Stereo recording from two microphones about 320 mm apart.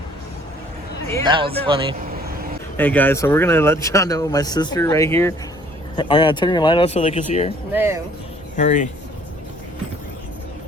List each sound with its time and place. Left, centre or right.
1.2 s speech: centre
2.7 s speech: centre; by 7.5 s left
7.7 s speech: centre
8.5 s speech: left